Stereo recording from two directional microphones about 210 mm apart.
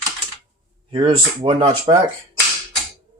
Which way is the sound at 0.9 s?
25° right (ahead or behind).